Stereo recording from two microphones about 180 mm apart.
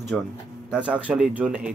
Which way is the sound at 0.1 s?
5° left (ahead or behind).